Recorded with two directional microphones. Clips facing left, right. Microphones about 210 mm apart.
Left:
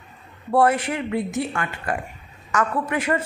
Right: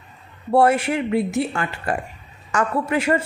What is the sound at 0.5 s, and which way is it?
A woman's voice, 25° right (ahead or behind).